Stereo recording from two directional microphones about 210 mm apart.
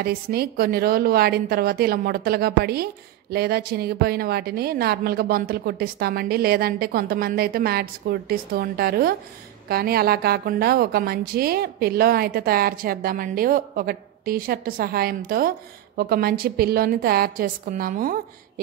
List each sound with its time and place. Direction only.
0.0 s a woman's voice: 45° right (ahead or behind)